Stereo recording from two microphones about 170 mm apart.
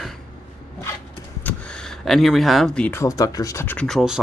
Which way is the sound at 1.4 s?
5° left (ahead or behind).